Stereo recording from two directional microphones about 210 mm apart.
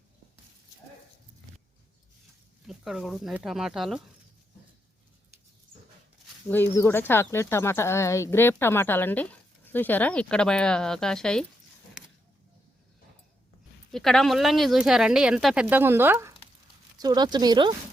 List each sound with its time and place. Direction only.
2.6 s speech: centre (ahead or behind)
6.5 s speech: 10° left (ahead or behind)
13.9 s speech: centre (ahead or behind); by 17.7 s 20° right (ahead or behind)